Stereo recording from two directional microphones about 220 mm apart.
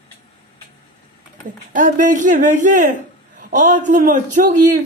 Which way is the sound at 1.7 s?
35° right (ahead or behind).